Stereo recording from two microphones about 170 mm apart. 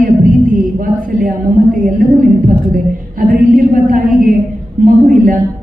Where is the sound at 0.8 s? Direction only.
55° right (ahead or behind).